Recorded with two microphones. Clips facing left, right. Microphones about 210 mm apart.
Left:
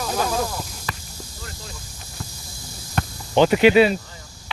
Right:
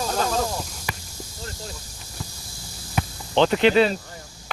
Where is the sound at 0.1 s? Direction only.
10° left (ahead or behind).